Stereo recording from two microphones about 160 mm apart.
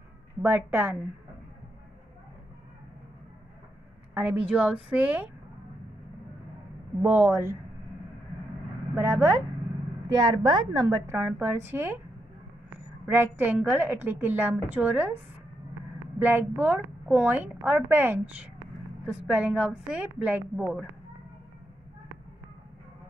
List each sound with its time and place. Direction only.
0.4 s a woman's voice: 10° right (ahead or behind)
4.1 s a woman's voice: 10° right (ahead or behind)
7.0 s a woman's voice: 10° right (ahead or behind)
8.9 s a woman's voice: 15° right (ahead or behind)
10.1 s a woman's voice: 30° right (ahead or behind)
11.1 s a woman's voice: 10° right (ahead or behind)
16.2 s a woman's voice: 10° right (ahead or behind)